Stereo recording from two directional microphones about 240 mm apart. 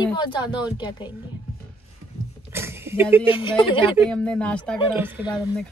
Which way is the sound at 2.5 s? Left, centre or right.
Centre.